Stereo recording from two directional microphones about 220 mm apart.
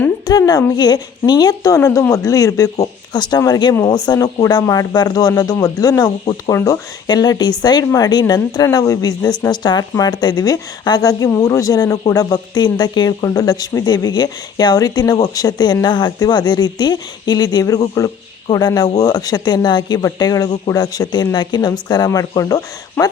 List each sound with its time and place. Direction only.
0.0 s a woman's voice: 15° left (ahead or behind)